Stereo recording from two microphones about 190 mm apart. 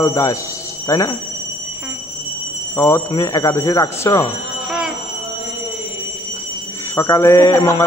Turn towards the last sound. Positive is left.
turn(degrees=15)  # may be behind; listen again after turning